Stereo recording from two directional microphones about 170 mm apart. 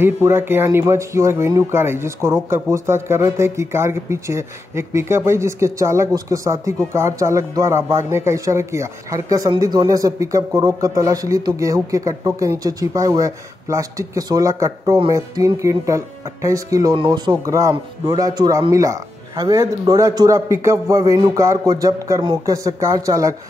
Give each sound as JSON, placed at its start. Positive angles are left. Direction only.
{"t": 0.0, "sound": "speech", "side_deg": -15}